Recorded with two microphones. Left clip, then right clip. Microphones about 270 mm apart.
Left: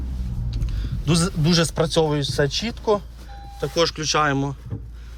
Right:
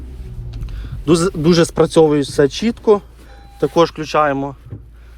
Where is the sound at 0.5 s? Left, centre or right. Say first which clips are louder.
Even; centre.